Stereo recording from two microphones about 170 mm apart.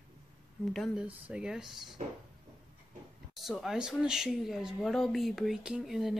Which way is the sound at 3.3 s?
Centre (ahead or behind).